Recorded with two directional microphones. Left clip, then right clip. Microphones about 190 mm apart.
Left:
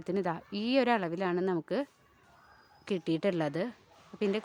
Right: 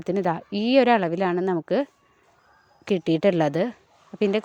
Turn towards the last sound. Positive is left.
turn(degrees=-30)  # may be behind; listen again after turning